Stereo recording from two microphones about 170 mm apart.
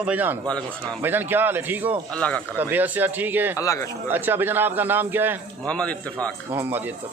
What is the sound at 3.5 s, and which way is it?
Speech, 20° left (ahead or behind).